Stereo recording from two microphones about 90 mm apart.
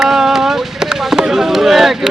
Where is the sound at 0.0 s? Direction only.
5° right (ahead or behind).